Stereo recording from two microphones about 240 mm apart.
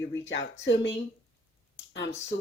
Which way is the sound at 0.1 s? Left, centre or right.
Left.